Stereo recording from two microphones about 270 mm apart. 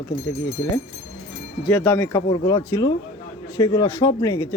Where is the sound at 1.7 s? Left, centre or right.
Centre.